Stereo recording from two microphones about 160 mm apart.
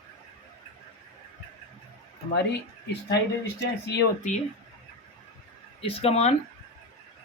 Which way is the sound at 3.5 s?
90° left.